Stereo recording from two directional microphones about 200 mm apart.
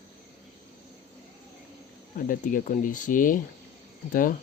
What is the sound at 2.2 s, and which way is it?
Speech, 40° left (ahead or behind).